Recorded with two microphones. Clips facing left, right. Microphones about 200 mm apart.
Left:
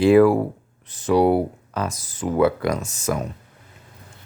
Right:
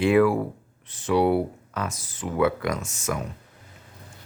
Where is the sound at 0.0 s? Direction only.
35° left (ahead or behind).